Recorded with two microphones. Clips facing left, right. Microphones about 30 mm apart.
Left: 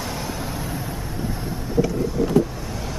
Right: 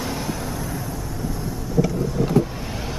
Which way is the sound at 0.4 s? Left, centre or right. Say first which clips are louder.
Even; centre.